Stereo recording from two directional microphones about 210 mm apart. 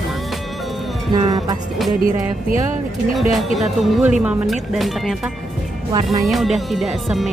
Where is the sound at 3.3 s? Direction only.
Centre (ahead or behind).